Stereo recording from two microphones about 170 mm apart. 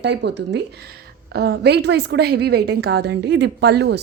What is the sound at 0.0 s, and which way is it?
Speech, 85° right.